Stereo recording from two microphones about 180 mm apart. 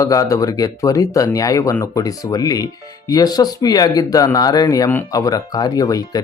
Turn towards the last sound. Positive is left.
turn(degrees=20)  # may be behind; listen again after turning